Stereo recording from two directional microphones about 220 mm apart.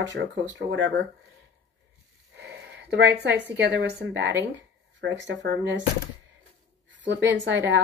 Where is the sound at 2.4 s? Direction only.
50° right (ahead or behind).